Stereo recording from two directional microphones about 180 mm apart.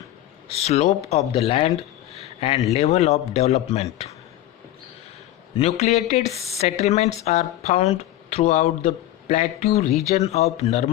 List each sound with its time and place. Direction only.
0.5 s speech: 35° left (ahead or behind)
2.1 s a sound: 35° left (ahead or behind)
2.7 s speech: 35° left (ahead or behind)
5.5 s speech: 35° left (ahead or behind)